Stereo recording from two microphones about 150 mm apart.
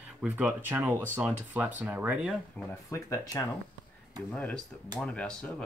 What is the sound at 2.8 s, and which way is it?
Speech, 20° left (ahead or behind).